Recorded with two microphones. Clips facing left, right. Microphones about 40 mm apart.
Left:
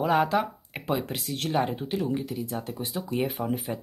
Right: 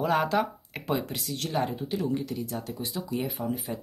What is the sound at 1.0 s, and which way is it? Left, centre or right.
Speech, left.